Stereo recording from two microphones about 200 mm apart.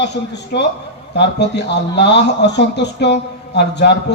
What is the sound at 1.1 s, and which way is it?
A man's voice, 60° left (ahead or behind).